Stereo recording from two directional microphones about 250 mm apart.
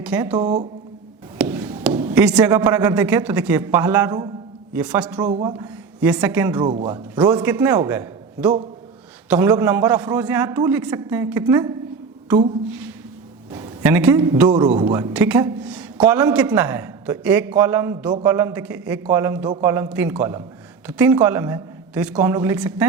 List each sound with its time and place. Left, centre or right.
0.0 s a man's voice: centre
1.4 s a sound: centre
2.3 s a man's voice: centre
5.2 s a man's voice: centre
6.6 s a man's voice: centre
13.5 s a man's voice: centre
15.1 s a man's voice: centre